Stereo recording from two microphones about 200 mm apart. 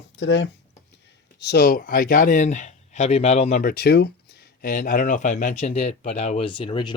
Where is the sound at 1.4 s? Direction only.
55° left (ahead or behind).